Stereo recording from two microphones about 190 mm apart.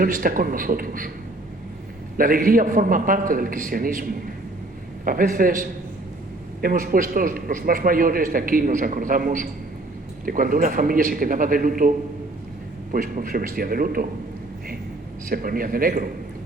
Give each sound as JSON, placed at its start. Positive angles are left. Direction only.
{"t": 0.0, "sound": "a man's voice", "side_deg": -50}
{"t": 2.1, "sound": "a man's voice", "side_deg": -45}
{"t": 15.3, "sound": "a man's voice", "side_deg": -50}